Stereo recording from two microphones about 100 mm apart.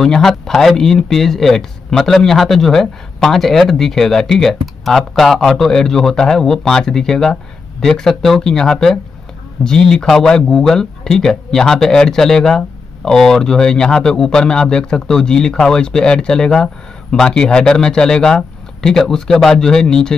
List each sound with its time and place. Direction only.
0.0 s speech: 5° left (ahead or behind)